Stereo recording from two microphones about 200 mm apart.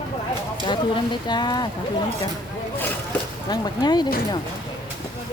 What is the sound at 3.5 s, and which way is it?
Speech, 20° left (ahead or behind).